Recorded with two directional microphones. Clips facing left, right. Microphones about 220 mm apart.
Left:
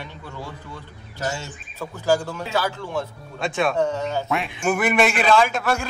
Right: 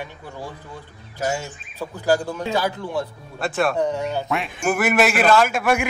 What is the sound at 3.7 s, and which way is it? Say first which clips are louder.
Speech: even; 15° right (ahead or behind).